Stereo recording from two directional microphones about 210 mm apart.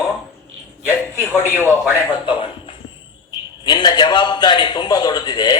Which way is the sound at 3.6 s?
20° left (ahead or behind).